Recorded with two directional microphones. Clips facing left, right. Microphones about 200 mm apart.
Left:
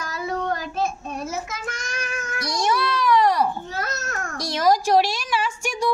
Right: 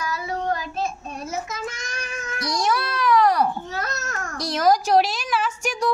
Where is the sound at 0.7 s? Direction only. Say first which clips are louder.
Left 2 dB; 55° left (ahead or behind).